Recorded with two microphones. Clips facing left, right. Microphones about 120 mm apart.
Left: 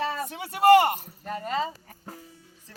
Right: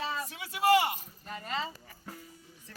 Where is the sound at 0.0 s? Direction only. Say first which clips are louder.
Left 6 dB; 60° left (ahead or behind).